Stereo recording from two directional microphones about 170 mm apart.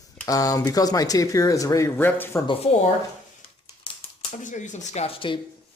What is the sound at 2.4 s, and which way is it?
Speech, 35° left (ahead or behind).